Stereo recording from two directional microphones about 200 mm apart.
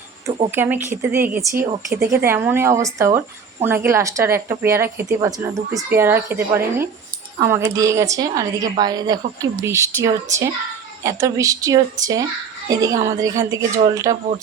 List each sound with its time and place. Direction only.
0.5 s a woman's voice: 10° right (ahead or behind)